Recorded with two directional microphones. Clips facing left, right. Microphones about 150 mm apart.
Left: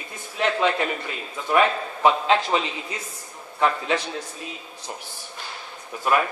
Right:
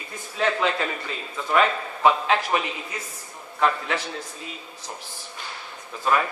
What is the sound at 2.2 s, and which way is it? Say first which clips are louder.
A man's voice: left 2 dB; 20° left (ahead or behind).